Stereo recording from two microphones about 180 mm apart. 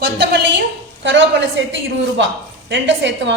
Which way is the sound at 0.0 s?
70° right (ahead or behind).